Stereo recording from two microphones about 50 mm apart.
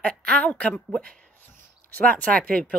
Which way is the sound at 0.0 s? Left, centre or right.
Left.